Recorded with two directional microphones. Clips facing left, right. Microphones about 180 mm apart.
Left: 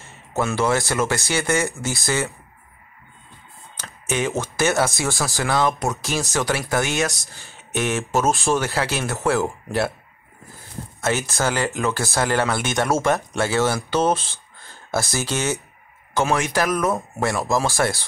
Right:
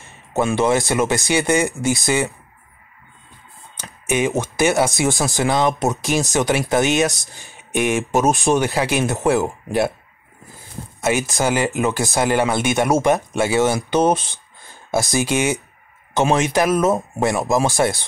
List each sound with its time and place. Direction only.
0.0 s speech: 15° right (ahead or behind)
3.8 s speech: 15° right (ahead or behind)
11.0 s speech: 15° right (ahead or behind)